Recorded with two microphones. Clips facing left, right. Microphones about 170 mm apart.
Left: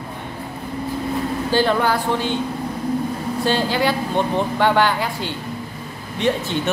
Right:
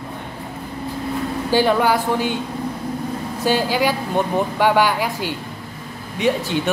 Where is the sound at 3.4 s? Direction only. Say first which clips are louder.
Right 1 dB; 10° right (ahead or behind).